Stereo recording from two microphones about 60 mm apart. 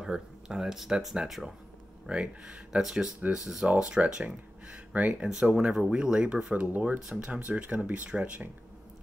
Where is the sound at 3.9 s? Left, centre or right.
Centre.